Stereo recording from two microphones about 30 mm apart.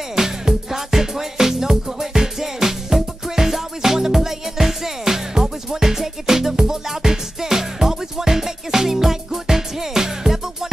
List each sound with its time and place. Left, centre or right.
0.1 s music: centre